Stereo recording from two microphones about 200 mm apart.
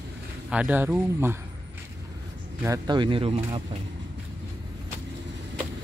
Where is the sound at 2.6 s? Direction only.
20° right (ahead or behind).